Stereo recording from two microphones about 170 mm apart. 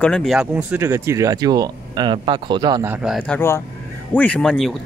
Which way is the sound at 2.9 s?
5° right (ahead or behind).